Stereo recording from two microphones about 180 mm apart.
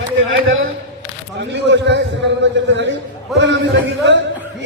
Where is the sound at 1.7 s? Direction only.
75° right (ahead or behind).